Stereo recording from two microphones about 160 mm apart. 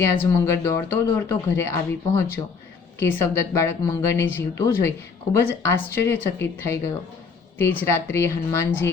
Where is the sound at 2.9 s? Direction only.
15° left (ahead or behind).